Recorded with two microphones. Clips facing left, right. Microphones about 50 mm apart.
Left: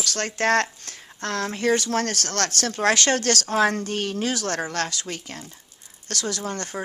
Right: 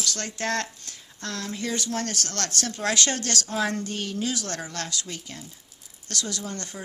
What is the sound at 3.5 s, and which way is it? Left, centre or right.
Speech, left.